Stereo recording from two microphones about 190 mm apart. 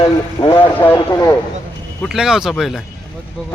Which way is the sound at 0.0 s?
30° left (ahead or behind).